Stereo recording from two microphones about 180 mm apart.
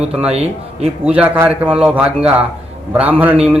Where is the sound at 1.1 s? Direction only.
10° right (ahead or behind).